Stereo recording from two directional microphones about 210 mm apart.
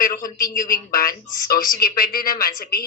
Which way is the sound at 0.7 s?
45° left (ahead or behind).